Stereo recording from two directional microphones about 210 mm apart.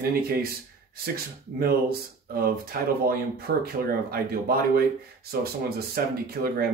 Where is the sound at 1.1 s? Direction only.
45° right (ahead or behind).